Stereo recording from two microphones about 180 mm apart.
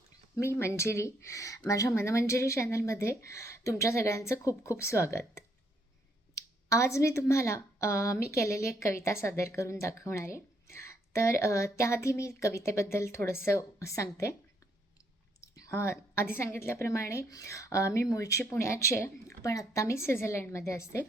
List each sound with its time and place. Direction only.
0.3 s a woman's voice: 15° left (ahead or behind)
15.4 s a woman's voice: 15° left (ahead or behind)